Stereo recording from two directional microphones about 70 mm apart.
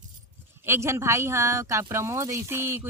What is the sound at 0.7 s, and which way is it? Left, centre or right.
Speech, right.